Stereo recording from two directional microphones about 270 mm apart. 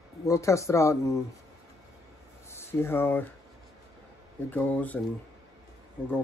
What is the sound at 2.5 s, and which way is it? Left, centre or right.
Speech, centre.